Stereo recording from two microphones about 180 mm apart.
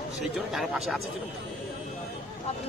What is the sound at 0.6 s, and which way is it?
Speech, centre (ahead or behind).